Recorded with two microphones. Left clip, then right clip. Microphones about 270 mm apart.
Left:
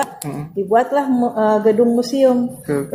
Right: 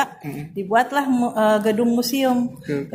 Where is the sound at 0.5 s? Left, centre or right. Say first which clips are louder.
Left 3 dB; right.